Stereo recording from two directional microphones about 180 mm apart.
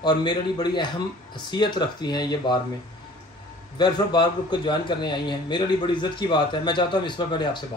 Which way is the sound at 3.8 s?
25° left (ahead or behind).